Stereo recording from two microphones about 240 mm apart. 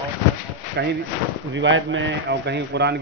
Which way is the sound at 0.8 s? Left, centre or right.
Right.